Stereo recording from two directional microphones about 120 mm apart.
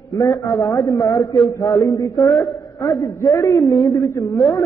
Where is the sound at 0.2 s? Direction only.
25° left (ahead or behind).